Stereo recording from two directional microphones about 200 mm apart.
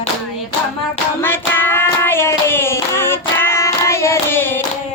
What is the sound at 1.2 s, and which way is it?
Hands, 10° left (ahead or behind).